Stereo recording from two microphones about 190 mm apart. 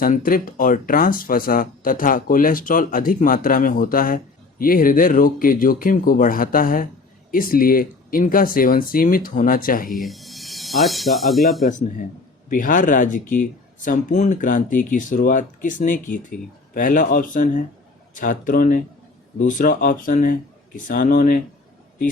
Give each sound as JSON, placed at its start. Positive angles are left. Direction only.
{"t": 0.0, "sound": "speech", "side_deg": 45}
{"t": 9.9, "sound": "speech", "side_deg": 0}
{"t": 11.6, "sound": "speech", "side_deg": 40}